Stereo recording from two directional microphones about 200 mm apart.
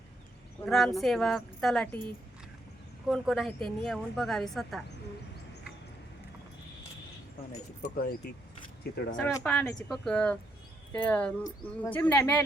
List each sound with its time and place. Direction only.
0.6 s a woman's voice: centre (ahead or behind)
3.1 s a woman's voice: centre (ahead or behind)
7.8 s speech: 45° left (ahead or behind)
9.1 s a woman's voice: 10° left (ahead or behind)